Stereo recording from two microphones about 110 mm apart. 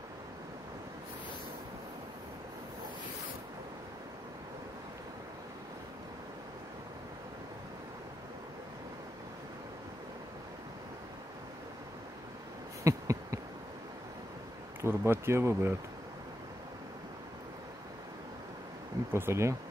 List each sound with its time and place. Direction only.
12.8 s insect: 30° right (ahead or behind)
14.8 s speech: 20° right (ahead or behind)
19.1 s speech: 25° right (ahead or behind)